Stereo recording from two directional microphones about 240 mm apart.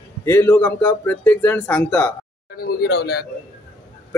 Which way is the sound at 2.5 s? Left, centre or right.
Left.